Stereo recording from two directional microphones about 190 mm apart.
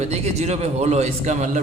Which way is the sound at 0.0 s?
35° right (ahead or behind).